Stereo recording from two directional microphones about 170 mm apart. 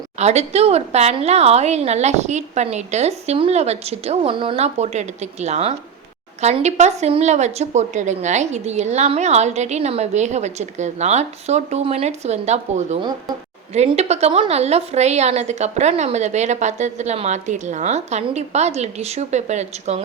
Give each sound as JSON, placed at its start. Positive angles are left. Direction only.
{"t": 0.2, "sound": "a woman's voice", "side_deg": -40}
{"t": 13.0, "sound": "speech", "side_deg": -25}
{"t": 13.7, "sound": "a woman's voice", "side_deg": -40}